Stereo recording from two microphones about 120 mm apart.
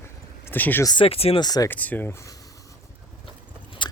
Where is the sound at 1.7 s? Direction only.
15° left (ahead or behind).